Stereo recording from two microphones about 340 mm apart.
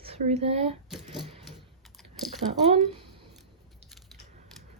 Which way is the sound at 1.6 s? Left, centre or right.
Centre.